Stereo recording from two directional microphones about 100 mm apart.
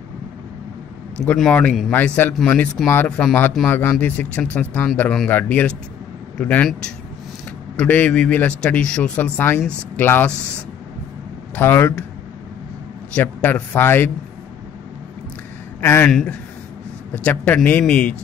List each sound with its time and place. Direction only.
1.2 s speech: 5° left (ahead or behind)
3.6 s a man's voice: 20° left (ahead or behind)
11.5 s a man's voice: 20° left (ahead or behind)
13.1 s a man's voice: 15° left (ahead or behind)
15.8 s speech: 20° left (ahead or behind)
16.1 s speech: 5° left (ahead or behind)
17.1 s speech: 15° left (ahead or behind)